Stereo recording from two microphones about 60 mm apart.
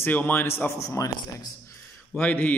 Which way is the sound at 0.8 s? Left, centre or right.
Left.